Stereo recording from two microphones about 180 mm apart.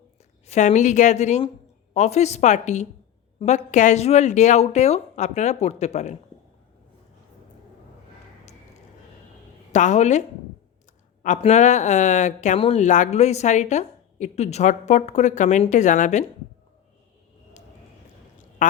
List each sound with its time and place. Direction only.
0.4 s speech: 40° left (ahead or behind)
9.7 s speech: 40° left (ahead or behind)
18.6 s speech: 45° left (ahead or behind)